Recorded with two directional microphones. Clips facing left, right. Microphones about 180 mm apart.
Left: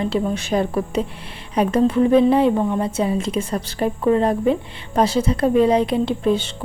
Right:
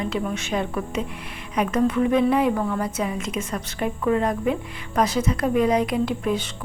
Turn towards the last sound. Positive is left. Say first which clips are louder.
# left 5 dB
turn(degrees=30)  # may be behind; listen again after turning